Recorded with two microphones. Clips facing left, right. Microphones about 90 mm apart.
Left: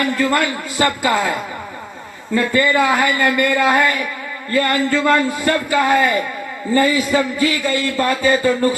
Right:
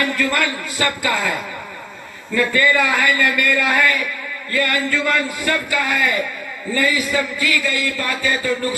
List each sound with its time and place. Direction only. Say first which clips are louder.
0.0 s a man's voice: left 3 dB; 25° left (ahead or behind)